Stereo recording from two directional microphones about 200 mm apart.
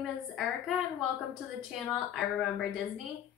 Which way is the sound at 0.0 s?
Centre (ahead or behind).